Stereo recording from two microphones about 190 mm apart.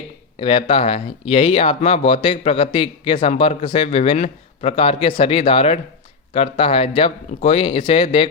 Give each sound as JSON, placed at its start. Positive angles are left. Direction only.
{"t": 0.3, "sound": "speech", "side_deg": 30}